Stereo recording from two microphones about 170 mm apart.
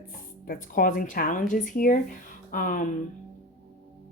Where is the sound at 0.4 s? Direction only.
55° left (ahead or behind).